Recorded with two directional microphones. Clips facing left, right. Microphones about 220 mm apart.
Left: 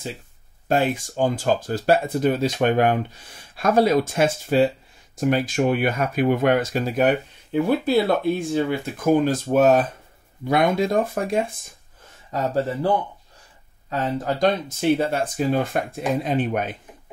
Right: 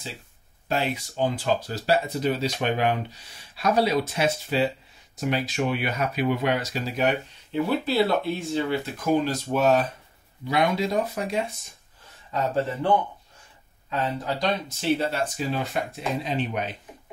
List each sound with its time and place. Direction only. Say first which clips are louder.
0.7 s speech: left 6 dB; 50° left (ahead or behind)
13.8 s speech: left 4 dB; 50° left (ahead or behind)